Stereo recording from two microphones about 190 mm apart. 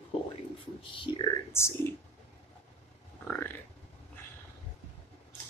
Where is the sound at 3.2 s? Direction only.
10° left (ahead or behind).